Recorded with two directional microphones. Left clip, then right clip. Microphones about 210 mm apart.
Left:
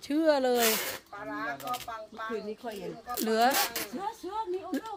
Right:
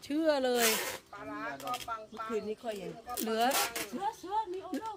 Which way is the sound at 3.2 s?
20° left (ahead or behind).